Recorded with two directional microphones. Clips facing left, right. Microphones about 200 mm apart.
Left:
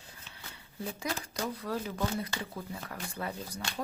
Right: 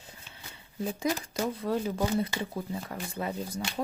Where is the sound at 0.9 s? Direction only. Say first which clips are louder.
Right 6 dB; 20° right (ahead or behind).